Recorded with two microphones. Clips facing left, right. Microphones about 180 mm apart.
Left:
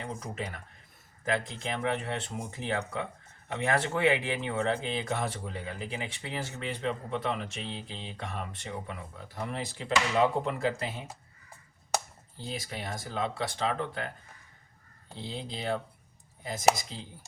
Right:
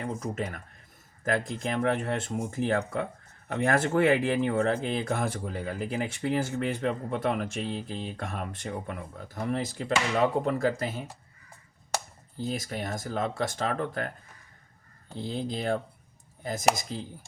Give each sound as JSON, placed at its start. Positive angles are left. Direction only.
{"t": 0.0, "sound": "speech", "side_deg": -45}
{"t": 12.5, "sound": "speech", "side_deg": -45}
{"t": 15.2, "sound": "speech", "side_deg": -50}